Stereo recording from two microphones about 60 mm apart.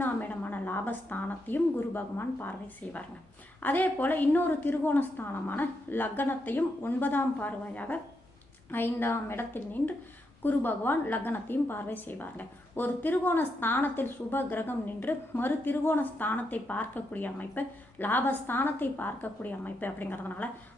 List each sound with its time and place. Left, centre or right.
0.0 s a woman's voice: left